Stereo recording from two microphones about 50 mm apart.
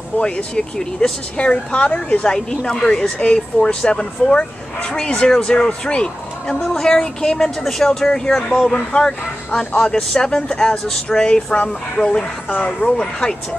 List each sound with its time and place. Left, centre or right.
0.2 s a woman's voice: centre
2.3 s speech: centre
12.4 s a woman's voice: left
12.8 s speech: centre